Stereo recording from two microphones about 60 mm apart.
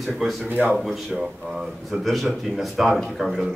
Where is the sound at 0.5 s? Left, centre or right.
Right.